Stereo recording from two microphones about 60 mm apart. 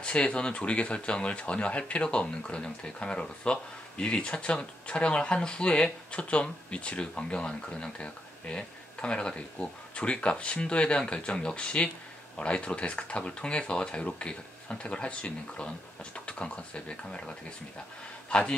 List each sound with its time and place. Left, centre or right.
0.0 s speech: centre